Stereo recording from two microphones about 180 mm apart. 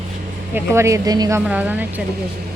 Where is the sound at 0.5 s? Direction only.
15° right (ahead or behind).